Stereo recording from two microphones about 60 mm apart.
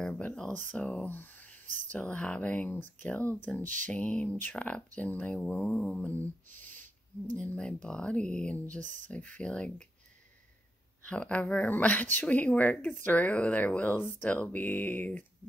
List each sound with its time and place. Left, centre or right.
0.0 s a sound: centre
0.5 s speech: left
8.6 s speech: left
11.1 s speech: left